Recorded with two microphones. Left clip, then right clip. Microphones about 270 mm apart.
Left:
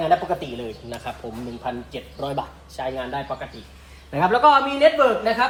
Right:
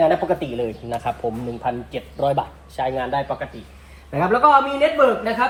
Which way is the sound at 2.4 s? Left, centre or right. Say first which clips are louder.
Right 5 dB; right.